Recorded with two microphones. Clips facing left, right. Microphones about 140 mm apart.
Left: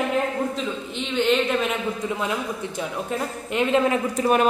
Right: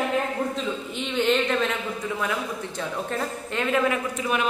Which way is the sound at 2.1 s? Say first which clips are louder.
Right 1 dB; 20° left (ahead or behind).